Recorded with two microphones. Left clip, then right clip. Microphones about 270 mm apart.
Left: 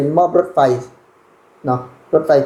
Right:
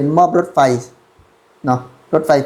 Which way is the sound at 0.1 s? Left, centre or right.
Right.